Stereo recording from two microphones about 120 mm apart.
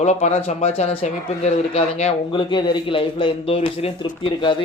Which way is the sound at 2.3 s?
45° left (ahead or behind).